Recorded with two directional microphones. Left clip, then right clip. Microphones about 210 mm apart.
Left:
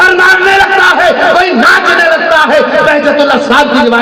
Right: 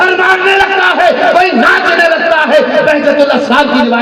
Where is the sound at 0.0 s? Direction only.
30° left (ahead or behind).